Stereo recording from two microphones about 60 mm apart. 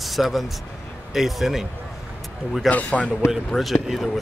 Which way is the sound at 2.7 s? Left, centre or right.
Left.